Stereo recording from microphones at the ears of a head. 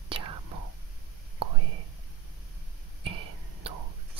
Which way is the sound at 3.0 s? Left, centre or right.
Right.